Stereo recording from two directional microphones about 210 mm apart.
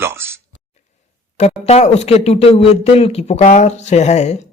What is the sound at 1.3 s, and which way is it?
Speech, 30° left (ahead or behind).